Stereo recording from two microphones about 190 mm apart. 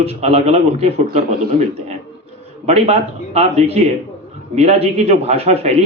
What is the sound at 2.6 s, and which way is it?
Speech, 35° right (ahead or behind).